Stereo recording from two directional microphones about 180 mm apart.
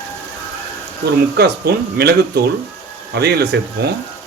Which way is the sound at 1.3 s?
60° right (ahead or behind).